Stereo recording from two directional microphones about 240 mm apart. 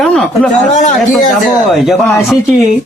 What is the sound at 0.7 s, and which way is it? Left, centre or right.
Speech, left.